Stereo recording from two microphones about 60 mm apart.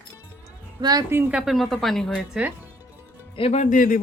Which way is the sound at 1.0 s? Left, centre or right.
Right.